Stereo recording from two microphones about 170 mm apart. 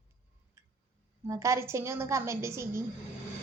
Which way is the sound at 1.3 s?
15° right (ahead or behind).